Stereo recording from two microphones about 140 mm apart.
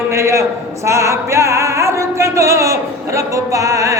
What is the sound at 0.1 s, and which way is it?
Music, 20° right (ahead or behind).